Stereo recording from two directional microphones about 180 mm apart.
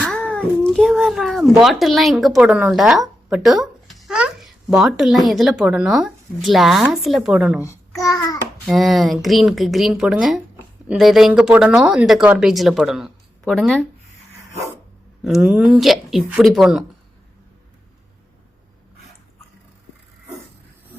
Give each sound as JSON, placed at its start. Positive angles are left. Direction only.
{"t": 0.0, "sound": "a child's voice", "side_deg": 5}
{"t": 7.6, "sound": "a child's voice", "side_deg": 15}
{"t": 8.6, "sound": "speech", "side_deg": 0}
{"t": 15.4, "sound": "speech", "side_deg": -5}